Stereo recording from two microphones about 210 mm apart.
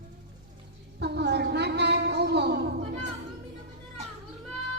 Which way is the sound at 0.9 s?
55° right (ahead or behind).